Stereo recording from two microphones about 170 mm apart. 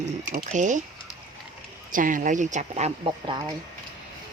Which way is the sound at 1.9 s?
50° right (ahead or behind).